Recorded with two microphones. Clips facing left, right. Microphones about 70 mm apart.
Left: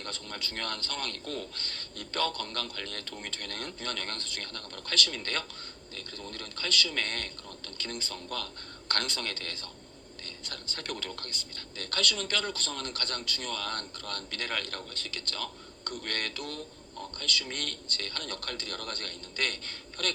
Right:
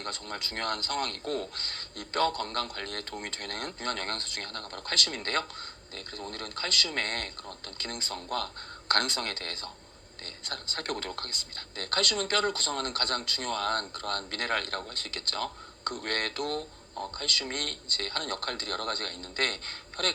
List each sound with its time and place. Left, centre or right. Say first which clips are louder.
0.0 s a man's voice: right 3 dB; right